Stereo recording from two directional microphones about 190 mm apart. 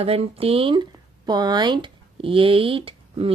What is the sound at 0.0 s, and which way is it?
A woman's voice, 30° right (ahead or behind).